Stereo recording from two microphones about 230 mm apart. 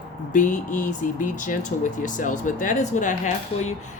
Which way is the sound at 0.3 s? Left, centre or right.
Left.